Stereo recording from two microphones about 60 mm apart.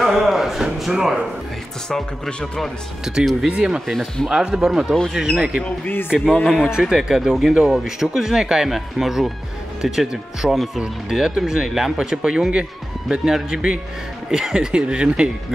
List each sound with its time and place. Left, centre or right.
0.0 s a sound: centre
1.9 s speech: centre
3.1 s speech: centre
3.8 s speech: centre
4.3 s speech: centre